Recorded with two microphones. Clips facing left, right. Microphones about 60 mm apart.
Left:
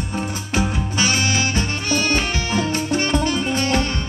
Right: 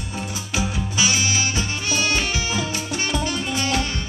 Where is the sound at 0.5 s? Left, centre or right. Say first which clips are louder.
Left 3 dB; left.